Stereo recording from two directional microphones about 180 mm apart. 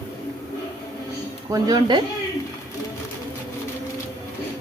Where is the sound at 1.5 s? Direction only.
25° right (ahead or behind).